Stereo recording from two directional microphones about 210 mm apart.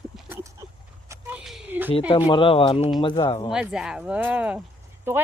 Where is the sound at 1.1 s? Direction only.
10° right (ahead or behind).